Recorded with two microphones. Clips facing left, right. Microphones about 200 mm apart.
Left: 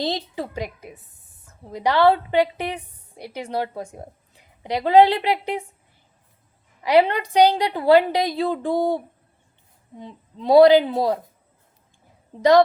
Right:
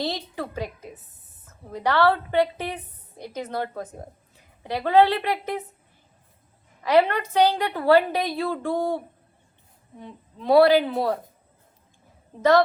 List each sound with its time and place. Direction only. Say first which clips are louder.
0.0 s a woman's voice: left 3 dB; 15° left (ahead or behind)
6.8 s a woman's voice: left 2 dB; 15° left (ahead or behind)
10.0 s a woman's voice: left 3 dB; 15° left (ahead or behind)
12.4 s a woman's voice: left 3 dB; 15° left (ahead or behind)